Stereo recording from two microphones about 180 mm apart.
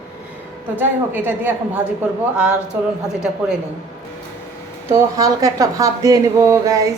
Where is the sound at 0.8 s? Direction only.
10° right (ahead or behind).